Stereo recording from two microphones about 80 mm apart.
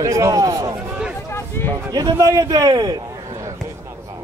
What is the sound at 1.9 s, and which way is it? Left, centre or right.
A man's voice, right.